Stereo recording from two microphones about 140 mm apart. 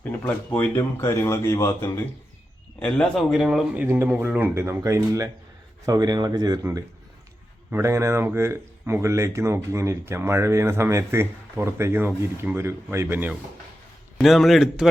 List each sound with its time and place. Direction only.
0.0 s a man's voice: 10° left (ahead or behind)
3.2 s a man's voice: centre (ahead or behind)
3.8 s speech: 15° right (ahead or behind)
14.2 s a man's voice: centre (ahead or behind)